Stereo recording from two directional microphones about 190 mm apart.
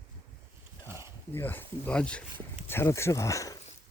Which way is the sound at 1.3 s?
10° left (ahead or behind).